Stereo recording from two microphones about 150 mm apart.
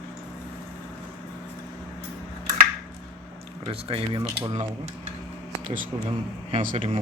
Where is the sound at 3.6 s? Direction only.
40° right (ahead or behind).